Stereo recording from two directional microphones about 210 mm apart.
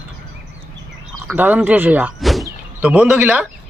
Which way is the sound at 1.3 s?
10° right (ahead or behind).